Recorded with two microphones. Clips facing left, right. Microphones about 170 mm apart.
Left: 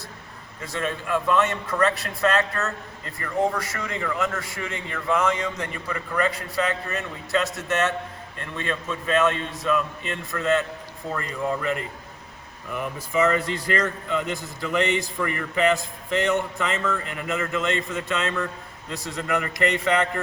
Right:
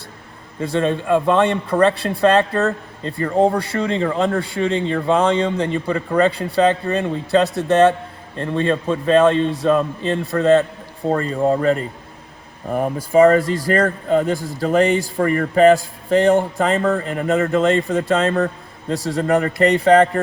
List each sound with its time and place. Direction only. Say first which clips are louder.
0.6 s a man's voice: right 10 dB; 30° right (ahead or behind)